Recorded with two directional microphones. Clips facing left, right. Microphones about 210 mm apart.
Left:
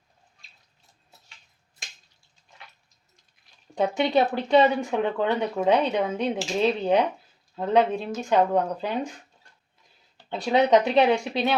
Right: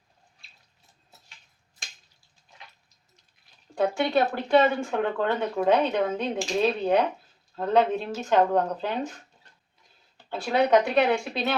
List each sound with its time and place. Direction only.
3.8 s speech: 20° left (ahead or behind)
10.2 s speech: 20° left (ahead or behind)